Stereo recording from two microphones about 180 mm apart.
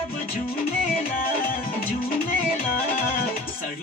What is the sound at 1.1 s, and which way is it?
Music, 55° left (ahead or behind).